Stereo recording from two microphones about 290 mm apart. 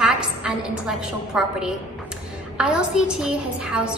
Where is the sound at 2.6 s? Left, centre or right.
Centre.